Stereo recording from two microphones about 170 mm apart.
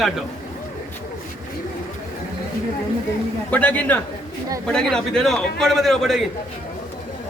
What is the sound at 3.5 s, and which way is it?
A man's voice, 10° left (ahead or behind).